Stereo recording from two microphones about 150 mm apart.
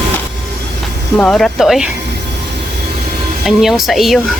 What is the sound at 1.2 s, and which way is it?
Speech, 5° left (ahead or behind).